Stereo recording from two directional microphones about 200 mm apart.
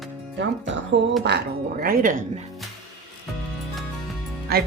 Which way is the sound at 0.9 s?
65° right (ahead or behind).